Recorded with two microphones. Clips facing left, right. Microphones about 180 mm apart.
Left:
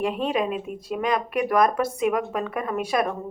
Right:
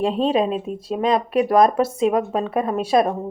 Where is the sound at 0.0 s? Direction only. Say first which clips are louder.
Right 5 dB; 30° right (ahead or behind).